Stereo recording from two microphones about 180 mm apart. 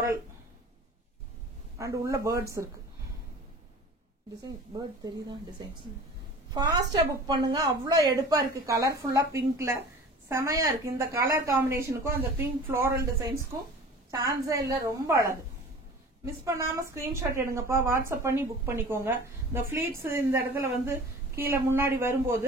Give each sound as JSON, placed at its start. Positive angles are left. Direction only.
{"t": 1.8, "sound": "a woman's voice", "side_deg": -15}
{"t": 4.7, "sound": "a woman's voice", "side_deg": -20}
{"t": 10.2, "sound": "a woman's voice", "side_deg": -15}
{"t": 16.4, "sound": "a woman's voice", "side_deg": -15}